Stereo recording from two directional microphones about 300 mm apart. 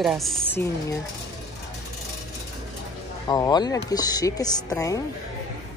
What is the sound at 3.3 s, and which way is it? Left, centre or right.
A woman's voice, centre.